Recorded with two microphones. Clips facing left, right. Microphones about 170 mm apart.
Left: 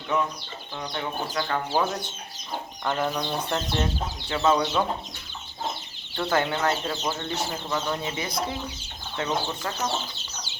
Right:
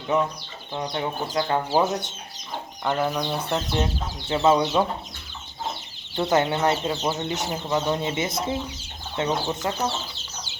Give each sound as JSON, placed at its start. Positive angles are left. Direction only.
{"t": 0.7, "sound": "speech", "side_deg": -25}
{"t": 2.8, "sound": "speech", "side_deg": -5}
{"t": 4.3, "sound": "speech", "side_deg": -25}
{"t": 6.1, "sound": "speech", "side_deg": -20}